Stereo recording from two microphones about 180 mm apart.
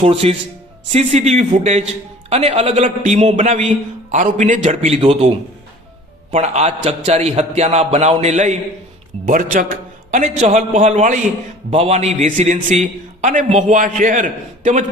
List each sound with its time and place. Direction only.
0.0 s a man's voice: 35° right (ahead or behind)
6.3 s a man's voice: 35° right (ahead or behind)